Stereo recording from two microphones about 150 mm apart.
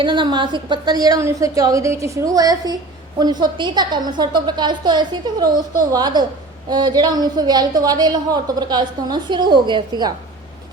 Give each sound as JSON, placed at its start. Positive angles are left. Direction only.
{"t": 0.0, "sound": "a woman's voice", "side_deg": -30}